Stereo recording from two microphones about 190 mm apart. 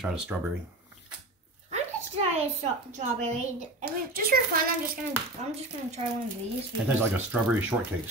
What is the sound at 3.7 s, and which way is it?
A child's voice, 50° right (ahead or behind).